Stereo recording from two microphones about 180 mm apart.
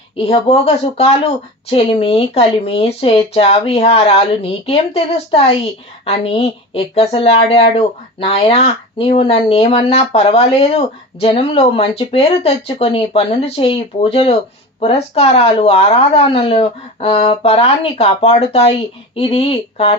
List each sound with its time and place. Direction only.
0.2 s speech: 35° left (ahead or behind)